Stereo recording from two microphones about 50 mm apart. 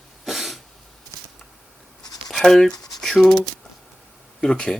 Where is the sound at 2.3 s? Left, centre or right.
Centre.